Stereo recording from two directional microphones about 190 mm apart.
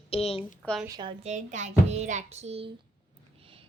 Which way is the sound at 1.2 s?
40° right (ahead or behind).